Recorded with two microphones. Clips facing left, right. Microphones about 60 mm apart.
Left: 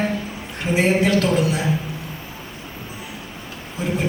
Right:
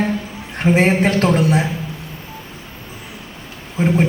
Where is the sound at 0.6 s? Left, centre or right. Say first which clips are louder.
Right 4 dB; right.